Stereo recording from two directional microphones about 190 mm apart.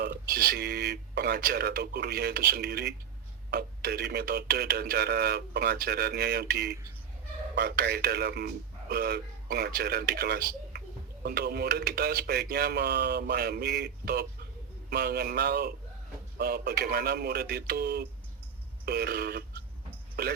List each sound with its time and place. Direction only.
0.1 s a man's voice: 50° right (ahead or behind)